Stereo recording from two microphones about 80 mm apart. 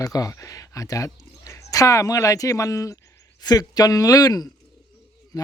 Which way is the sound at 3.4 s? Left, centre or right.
Left.